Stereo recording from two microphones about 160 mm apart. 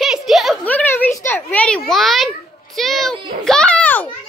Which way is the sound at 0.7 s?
10° left (ahead or behind).